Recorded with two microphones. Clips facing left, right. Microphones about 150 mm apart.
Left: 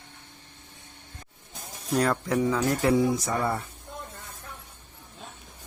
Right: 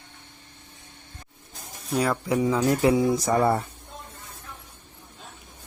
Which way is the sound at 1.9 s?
Centre (ahead or behind).